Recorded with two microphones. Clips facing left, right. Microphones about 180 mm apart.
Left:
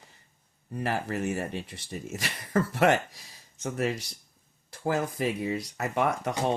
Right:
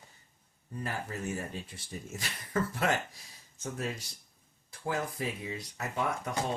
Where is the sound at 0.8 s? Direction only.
85° left.